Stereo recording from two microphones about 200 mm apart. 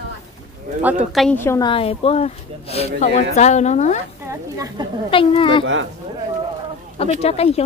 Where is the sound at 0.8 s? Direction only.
5° right (ahead or behind).